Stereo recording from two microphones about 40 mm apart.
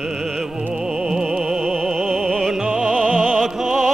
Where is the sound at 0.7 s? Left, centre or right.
Centre.